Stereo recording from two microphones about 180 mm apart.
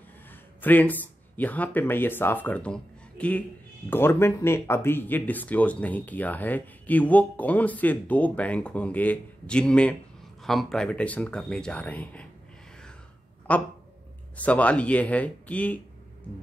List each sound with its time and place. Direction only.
0.6 s speech: 10° left (ahead or behind)
13.5 s speech: 10° left (ahead or behind)